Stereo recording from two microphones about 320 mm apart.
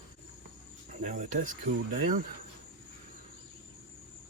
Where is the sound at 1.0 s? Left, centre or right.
Right.